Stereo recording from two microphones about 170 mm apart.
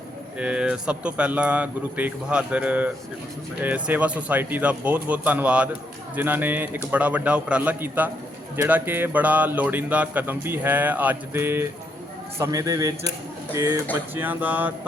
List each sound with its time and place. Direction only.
0.3 s a man's voice: 5° right (ahead or behind)